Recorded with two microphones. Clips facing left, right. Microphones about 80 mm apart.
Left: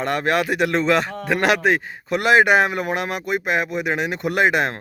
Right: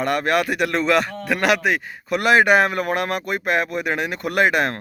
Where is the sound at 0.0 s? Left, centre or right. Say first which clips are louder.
Right 1 dB; left.